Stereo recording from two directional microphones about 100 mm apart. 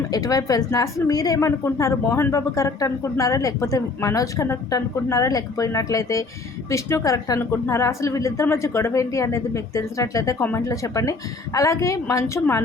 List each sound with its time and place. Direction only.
0.1 s a woman's voice: 40° left (ahead or behind)